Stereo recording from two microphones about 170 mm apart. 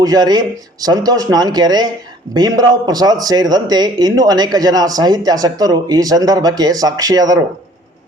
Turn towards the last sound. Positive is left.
turn(degrees=-20)  # may be behind; listen again after turning